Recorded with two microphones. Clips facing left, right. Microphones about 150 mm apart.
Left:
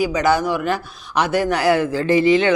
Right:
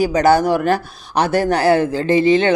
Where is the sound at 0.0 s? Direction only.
35° right (ahead or behind).